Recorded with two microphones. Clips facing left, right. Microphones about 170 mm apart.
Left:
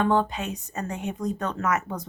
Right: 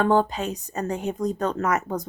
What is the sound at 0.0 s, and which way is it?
A woman's voice, 40° right (ahead or behind).